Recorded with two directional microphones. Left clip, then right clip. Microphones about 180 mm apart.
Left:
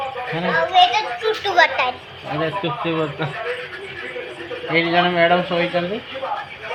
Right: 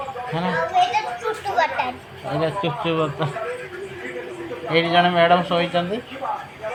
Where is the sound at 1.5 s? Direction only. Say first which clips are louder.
Left 5 dB; 20° left (ahead or behind).